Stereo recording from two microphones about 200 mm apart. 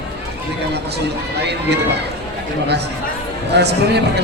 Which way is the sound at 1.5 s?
55° right (ahead or behind).